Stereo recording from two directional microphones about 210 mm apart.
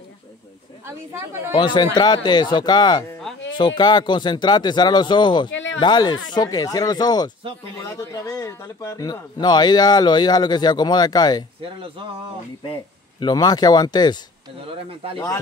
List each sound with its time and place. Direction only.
1.5 s speech: 20° left (ahead or behind)
5.5 s a sound: 65° left (ahead or behind)
5.8 s speech: 20° left (ahead or behind)
13.2 s speech: 20° left (ahead or behind)